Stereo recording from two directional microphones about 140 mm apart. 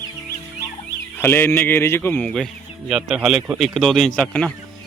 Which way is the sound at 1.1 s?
15° left (ahead or behind).